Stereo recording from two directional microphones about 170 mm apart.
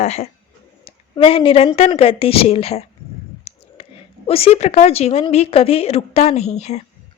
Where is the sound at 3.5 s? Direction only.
40° left (ahead or behind).